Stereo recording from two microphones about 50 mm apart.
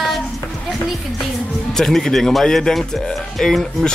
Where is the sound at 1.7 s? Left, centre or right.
Centre.